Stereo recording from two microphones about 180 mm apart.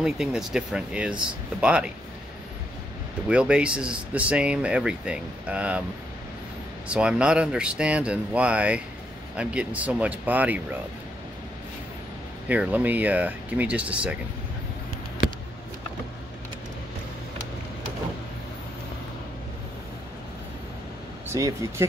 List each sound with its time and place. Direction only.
0.0 s speech: 5° right (ahead or behind)
3.3 s speech: 5° right (ahead or behind)
6.9 s speech: 5° right (ahead or behind)
12.4 s speech: 10° right (ahead or behind)
21.3 s speech: 15° right (ahead or behind)